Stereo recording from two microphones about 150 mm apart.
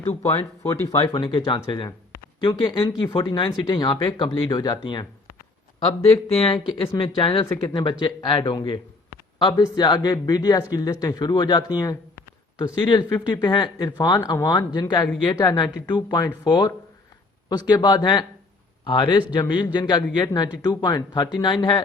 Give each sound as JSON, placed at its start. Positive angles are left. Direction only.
{"t": 0.3, "sound": "speech", "side_deg": 40}
{"t": 0.7, "sound": "a man's voice", "side_deg": 20}
{"t": 0.9, "sound": "a man's voice", "side_deg": 30}
{"t": 6.3, "sound": "a man's voice", "side_deg": 35}